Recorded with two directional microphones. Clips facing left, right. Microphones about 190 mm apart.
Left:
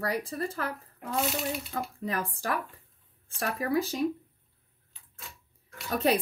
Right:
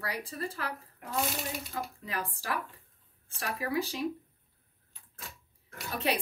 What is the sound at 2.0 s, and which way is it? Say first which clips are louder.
Speech: left 5 dB; 45° left (ahead or behind).